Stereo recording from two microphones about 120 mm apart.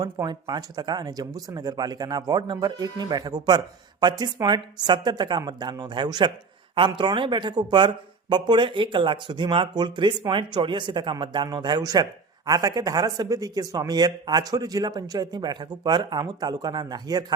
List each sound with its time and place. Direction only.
0.0 s speech: 35° right (ahead or behind)